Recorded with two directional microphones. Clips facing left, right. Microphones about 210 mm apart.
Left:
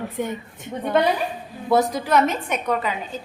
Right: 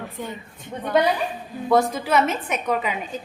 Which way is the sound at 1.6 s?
Centre (ahead or behind).